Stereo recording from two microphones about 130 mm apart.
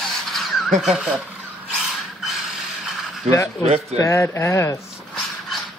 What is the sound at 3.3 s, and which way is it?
Speech, 55° right (ahead or behind).